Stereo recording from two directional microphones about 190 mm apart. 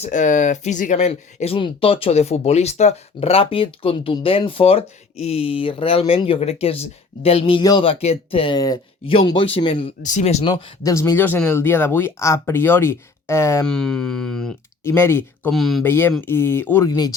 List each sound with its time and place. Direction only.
0.0 s speech: 40° left (ahead or behind)
10.0 s speech: 35° left (ahead or behind)
10.5 s speech: 15° left (ahead or behind)
13.7 s speech: 5° left (ahead or behind)
15.5 s speech: centre (ahead or behind)
15.8 s speech: 10° left (ahead or behind)